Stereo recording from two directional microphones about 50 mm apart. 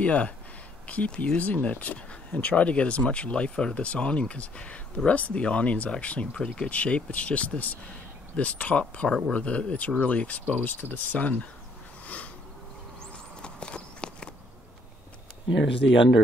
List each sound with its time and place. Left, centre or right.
0.0 s speech: left
13.4 s clip-clop: centre